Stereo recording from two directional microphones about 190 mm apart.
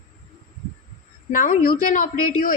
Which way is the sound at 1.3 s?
45° left (ahead or behind).